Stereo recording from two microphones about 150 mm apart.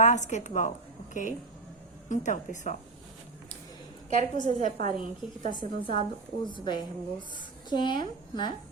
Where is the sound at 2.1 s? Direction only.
55° left (ahead or behind).